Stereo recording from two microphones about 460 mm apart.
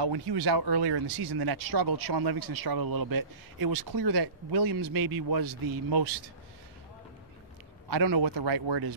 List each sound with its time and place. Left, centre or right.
0.0 s speech: right
7.9 s speech: right